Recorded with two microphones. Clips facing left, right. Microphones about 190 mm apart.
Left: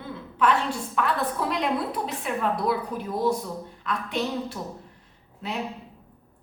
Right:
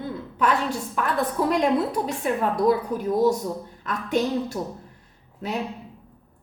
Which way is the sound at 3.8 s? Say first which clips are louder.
Right 5 dB; 45° right (ahead or behind).